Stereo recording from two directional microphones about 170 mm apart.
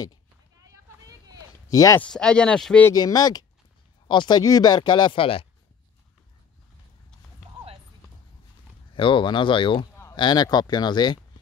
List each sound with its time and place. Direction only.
0.6 s vehicle: 20° right (ahead or behind)
1.7 s speech: 20° left (ahead or behind)
2.0 s speech: 5° left (ahead or behind)
2.9 s speech: 20° left (ahead or behind)
8.9 s speech: 30° left (ahead or behind)